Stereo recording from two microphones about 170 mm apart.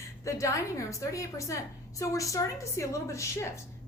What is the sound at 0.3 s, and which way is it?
A woman's voice, 20° left (ahead or behind).